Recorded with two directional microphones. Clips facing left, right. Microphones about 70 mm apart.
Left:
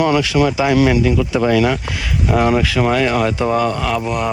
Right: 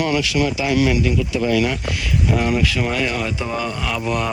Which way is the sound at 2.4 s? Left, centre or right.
Left.